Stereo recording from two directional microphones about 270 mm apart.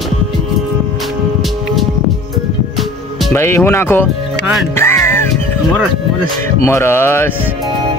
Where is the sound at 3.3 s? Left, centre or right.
Centre.